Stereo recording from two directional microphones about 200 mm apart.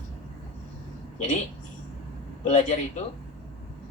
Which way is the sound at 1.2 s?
35° left (ahead or behind).